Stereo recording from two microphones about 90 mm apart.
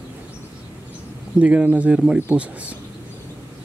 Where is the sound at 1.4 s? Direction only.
15° right (ahead or behind).